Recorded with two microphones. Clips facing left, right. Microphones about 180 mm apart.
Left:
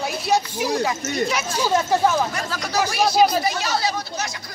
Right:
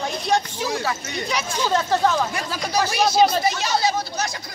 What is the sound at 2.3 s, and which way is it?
Speech, 15° right (ahead or behind).